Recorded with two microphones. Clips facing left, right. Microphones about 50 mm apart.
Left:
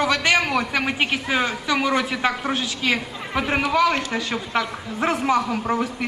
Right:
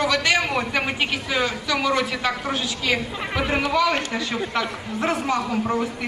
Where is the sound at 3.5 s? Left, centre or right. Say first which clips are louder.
Left 2 dB; left.